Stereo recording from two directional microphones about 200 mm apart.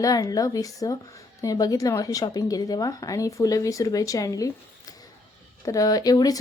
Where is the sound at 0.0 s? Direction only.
20° left (ahead or behind).